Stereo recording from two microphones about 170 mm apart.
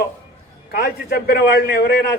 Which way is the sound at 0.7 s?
70° left (ahead or behind).